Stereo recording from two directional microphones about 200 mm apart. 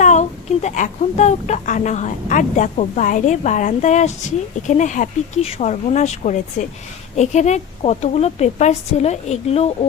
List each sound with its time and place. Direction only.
0.0 s a woman's voice: 35° left (ahead or behind)